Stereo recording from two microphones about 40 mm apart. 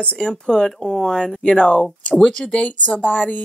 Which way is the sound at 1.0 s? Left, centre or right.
Centre.